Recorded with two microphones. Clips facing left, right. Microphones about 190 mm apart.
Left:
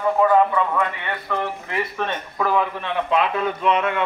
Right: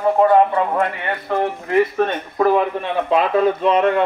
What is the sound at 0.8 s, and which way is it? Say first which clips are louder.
A man's voice: right 4 dB; 45° right (ahead or behind).